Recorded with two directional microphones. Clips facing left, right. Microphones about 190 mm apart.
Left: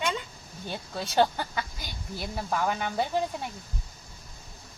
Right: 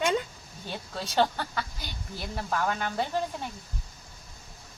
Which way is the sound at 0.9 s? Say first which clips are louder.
Left 2 dB; 10° left (ahead or behind).